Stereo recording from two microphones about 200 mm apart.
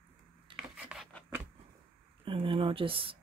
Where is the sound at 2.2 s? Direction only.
25° right (ahead or behind).